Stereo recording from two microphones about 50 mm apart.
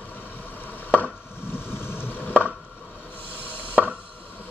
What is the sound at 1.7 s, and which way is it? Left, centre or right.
Boat, left.